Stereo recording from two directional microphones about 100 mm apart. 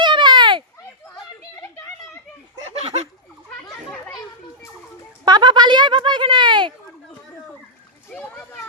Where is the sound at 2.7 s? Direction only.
90° right.